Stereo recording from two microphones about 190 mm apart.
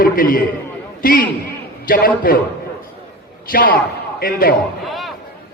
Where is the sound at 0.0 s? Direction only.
45° left (ahead or behind).